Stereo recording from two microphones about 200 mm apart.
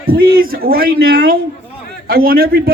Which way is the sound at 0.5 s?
50° right (ahead or behind).